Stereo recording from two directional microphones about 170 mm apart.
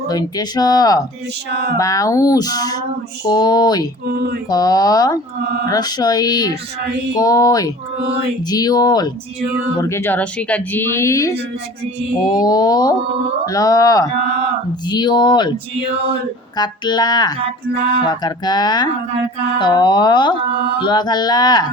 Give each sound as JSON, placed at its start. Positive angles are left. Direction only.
{"t": 0.1, "sound": "speech", "side_deg": 20}
{"t": 1.5, "sound": "speech", "side_deg": -75}
{"t": 1.8, "sound": "speech", "side_deg": 20}
{"t": 4.1, "sound": "speech", "side_deg": -70}
{"t": 4.4, "sound": "speech", "side_deg": 20}
{"t": 9.9, "sound": "speech", "side_deg": 10}
{"t": 16.6, "sound": "speech", "side_deg": 25}